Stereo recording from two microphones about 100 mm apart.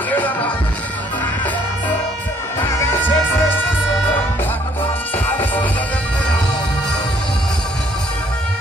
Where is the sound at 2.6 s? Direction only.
20° left (ahead or behind).